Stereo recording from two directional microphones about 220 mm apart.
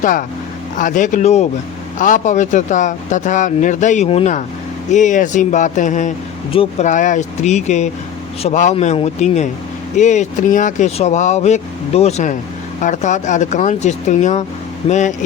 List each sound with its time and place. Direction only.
0.0 s speech: 35° left (ahead or behind)